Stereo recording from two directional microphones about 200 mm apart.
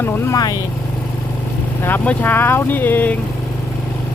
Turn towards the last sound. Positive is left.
turn(degrees=10)  # may be behind; listen again after turning